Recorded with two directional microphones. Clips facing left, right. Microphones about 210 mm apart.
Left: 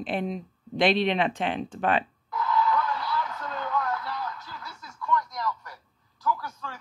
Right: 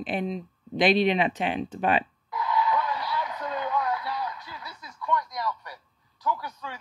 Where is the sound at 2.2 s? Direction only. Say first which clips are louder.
Left 1 dB; 20° right (ahead or behind).